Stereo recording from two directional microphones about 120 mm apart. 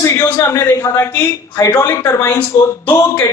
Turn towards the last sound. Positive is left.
turn(degrees=25)  # may be behind; listen again after turning